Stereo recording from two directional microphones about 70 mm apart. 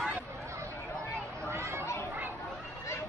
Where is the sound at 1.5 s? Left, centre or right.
Right.